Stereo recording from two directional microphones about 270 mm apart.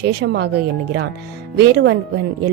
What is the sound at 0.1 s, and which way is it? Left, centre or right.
Speech, right.